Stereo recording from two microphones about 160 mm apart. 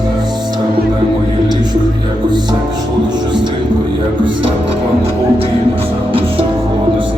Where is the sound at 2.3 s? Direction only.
25° right (ahead or behind).